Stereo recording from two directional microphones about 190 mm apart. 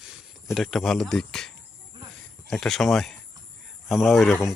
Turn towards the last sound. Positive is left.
turn(degrees=0)  # may be behind; listen again after turning